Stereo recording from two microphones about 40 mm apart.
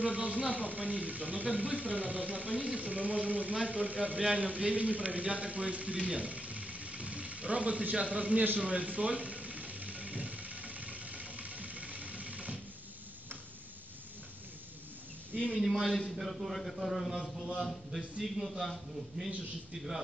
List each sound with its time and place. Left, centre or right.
0.0 s a man's voice: right
8.5 s a sound: right
15.6 s a man's voice: centre